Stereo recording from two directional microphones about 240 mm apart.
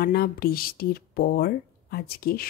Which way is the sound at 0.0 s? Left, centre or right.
Left.